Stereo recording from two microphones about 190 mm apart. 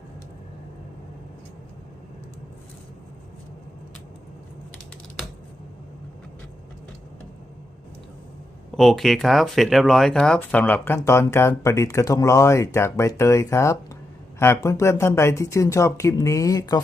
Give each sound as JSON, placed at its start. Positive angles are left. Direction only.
{"t": 8.7, "sound": "speech", "side_deg": 0}